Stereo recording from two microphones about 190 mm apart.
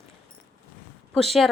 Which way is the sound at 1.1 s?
Centre (ahead or behind).